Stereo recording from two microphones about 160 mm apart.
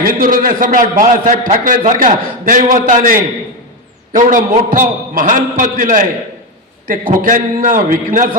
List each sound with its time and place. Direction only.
0.0 s a man's voice: 65° right (ahead or behind)